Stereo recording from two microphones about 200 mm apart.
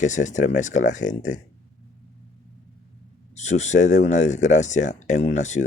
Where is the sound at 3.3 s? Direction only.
35° left (ahead or behind).